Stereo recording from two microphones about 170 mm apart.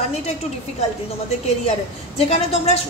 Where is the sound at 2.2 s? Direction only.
35° left (ahead or behind).